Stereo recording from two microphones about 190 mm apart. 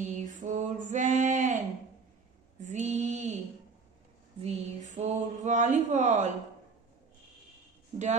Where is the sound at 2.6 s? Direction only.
35° right (ahead or behind).